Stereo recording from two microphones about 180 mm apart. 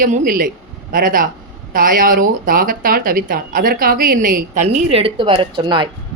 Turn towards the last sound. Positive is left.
turn(degrees=-25)  # may be behind; listen again after turning